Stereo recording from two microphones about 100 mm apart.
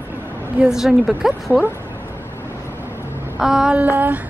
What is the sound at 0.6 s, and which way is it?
Speech, 5° right (ahead or behind).